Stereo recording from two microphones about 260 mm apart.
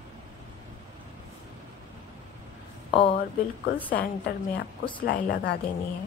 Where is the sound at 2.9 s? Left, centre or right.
Left.